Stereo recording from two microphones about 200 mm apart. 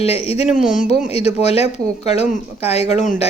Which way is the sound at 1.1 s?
30° left (ahead or behind).